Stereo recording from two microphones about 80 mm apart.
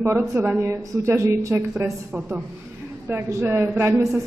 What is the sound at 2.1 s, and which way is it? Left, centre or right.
Speech, centre.